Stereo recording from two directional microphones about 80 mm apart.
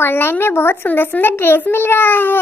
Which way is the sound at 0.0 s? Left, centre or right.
Left.